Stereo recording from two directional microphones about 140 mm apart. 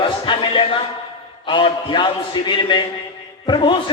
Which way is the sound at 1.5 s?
35° left (ahead or behind).